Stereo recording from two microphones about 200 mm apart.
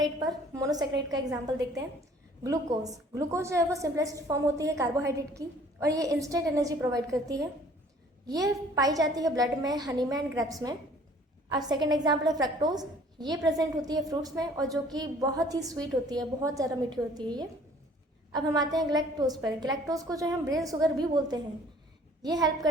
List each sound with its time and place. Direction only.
0.0 s a woman's voice: 20° right (ahead or behind)
2.4 s a woman's voice: 15° right (ahead or behind)
11.5 s a woman's voice: 20° right (ahead or behind)